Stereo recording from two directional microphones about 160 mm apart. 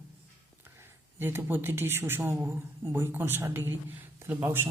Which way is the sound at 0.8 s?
15° right (ahead or behind).